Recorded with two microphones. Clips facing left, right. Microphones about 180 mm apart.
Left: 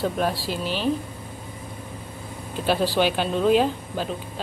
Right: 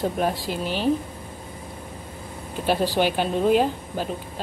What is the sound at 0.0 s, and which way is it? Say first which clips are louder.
Speech: even; 15° right (ahead or behind).